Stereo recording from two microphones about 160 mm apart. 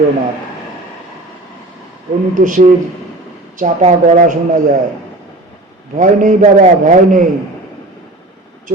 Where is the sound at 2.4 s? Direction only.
55° right (ahead or behind).